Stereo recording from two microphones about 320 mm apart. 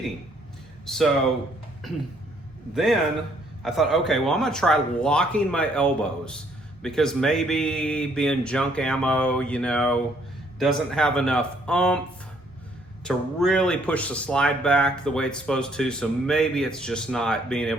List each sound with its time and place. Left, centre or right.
0.9 s speech: centre
2.7 s speech: centre
13.1 s speech: centre